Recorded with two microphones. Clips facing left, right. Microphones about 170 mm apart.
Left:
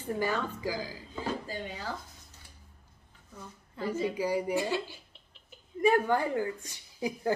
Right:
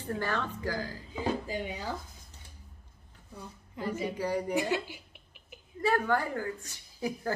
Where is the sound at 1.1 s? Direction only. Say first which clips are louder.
Right 3 dB; 15° right (ahead or behind).